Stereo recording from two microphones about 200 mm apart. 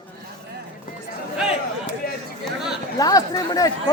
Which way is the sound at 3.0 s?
15° left (ahead or behind).